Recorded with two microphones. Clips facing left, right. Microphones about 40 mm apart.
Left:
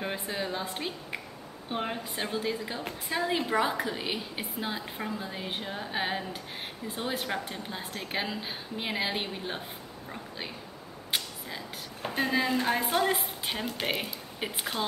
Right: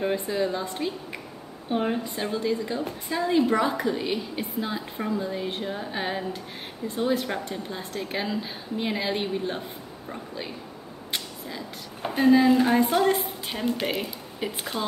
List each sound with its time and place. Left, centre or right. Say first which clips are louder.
0.0 s a woman's voice: right 8 dB; centre
1.7 s a woman's voice: right 7 dB; centre
2.3 s a woman's voice: right 7 dB; centre
11.1 s a sound: even; centre
12.2 s a woman's voice: right 9 dB; centre
13.8 s a woman's voice: right 3 dB; centre